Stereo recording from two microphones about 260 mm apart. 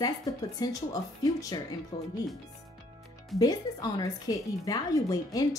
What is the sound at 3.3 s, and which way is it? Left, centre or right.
Speech, centre.